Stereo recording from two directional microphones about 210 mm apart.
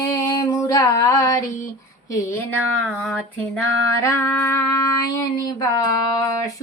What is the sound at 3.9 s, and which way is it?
Speech, 15° left (ahead or behind).